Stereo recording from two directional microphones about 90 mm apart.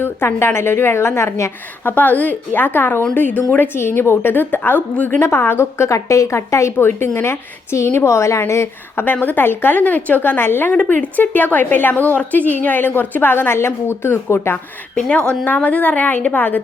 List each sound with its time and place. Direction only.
0.0 s a woman's voice: 25° left (ahead or behind)